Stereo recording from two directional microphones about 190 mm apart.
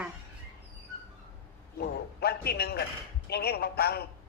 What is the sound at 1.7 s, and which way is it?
A man's voice, 55° left (ahead or behind).